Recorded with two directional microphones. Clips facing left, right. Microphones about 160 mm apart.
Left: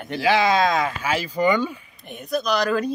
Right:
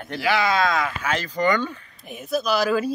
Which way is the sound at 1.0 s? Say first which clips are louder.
Left 1 dB; 10° left (ahead or behind).